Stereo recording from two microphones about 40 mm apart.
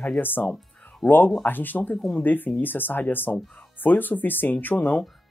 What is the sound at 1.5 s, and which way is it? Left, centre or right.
Speech, left.